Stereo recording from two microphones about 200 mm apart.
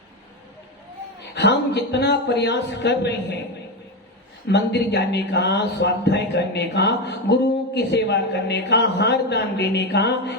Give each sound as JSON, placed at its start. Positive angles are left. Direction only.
{"t": 1.4, "sound": "speech", "side_deg": 60}
{"t": 4.4, "sound": "speech", "side_deg": 60}